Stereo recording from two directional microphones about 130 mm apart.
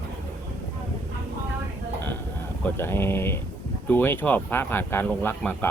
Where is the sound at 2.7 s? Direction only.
20° left (ahead or behind).